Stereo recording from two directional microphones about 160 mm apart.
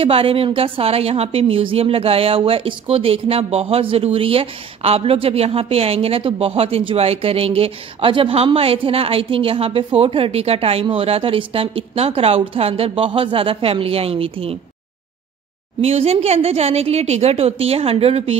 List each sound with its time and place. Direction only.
0.0 s a woman's voice: 35° right (ahead or behind)
15.8 s a woman's voice: 40° right (ahead or behind)